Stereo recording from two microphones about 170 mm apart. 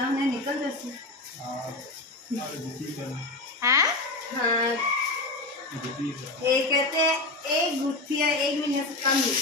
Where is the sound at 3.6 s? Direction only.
20° right (ahead or behind).